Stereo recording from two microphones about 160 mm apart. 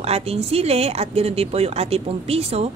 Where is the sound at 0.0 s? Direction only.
40° right (ahead or behind).